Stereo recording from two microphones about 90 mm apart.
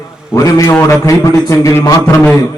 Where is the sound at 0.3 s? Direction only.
40° left (ahead or behind).